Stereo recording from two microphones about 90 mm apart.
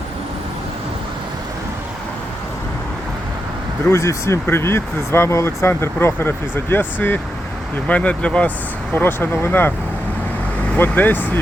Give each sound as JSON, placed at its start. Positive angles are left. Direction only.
{"t": 3.8, "sound": "speech", "side_deg": 35}
{"t": 10.8, "sound": "speech", "side_deg": 20}